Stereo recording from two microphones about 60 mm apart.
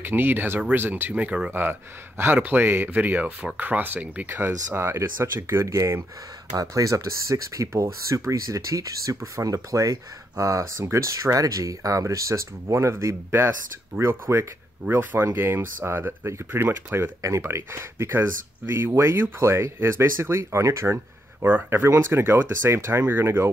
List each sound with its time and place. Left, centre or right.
0.0 s speech: right
1.1 s speech: centre
1.5 s speech: right
4.7 s speech: right
6.5 s speech: right
13.9 s speech: right
17.2 s speech: right